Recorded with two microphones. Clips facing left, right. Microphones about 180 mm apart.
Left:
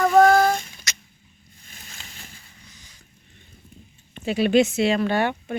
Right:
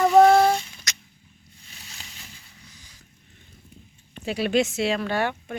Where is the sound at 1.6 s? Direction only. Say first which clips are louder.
Left 1 dB; 50° left (ahead or behind).